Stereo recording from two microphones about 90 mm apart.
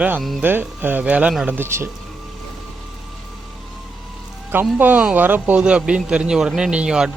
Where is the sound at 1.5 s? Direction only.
25° right (ahead or behind).